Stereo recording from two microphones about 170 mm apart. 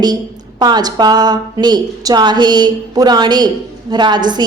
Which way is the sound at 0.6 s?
25° right (ahead or behind).